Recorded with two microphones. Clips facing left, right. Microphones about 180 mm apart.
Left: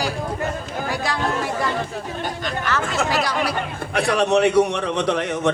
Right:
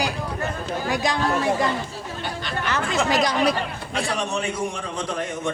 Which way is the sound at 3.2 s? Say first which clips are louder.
Right 3 dB; 20° right (ahead or behind).